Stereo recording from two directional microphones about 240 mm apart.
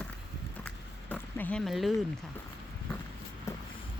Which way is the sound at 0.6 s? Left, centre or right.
Centre.